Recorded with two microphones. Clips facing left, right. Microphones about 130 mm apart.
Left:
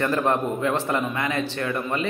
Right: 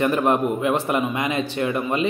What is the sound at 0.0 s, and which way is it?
A man's voice, 15° right (ahead or behind).